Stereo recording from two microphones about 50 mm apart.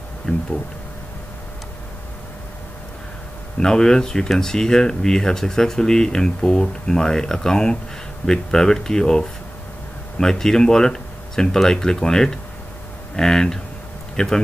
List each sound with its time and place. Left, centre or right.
0.3 s speech: left
3.5 s speech: centre